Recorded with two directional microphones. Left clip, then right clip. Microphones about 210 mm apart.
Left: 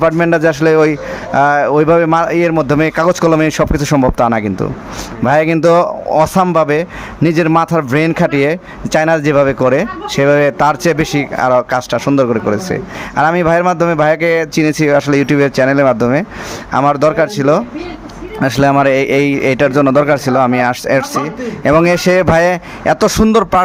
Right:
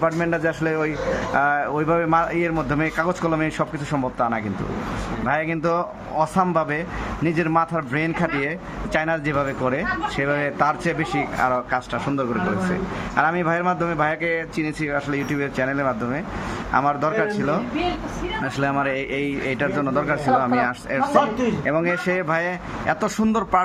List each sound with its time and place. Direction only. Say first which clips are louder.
0.0 s a man's voice: left 11 dB; 50° left (ahead or behind)